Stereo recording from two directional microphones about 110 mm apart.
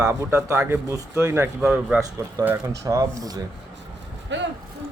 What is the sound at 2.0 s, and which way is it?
A man's voice, 30° right (ahead or behind).